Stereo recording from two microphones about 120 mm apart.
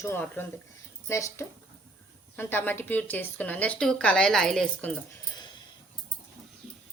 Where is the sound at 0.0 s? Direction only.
20° left (ahead or behind).